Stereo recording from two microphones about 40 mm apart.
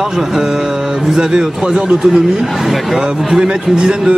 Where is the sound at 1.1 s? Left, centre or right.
Right.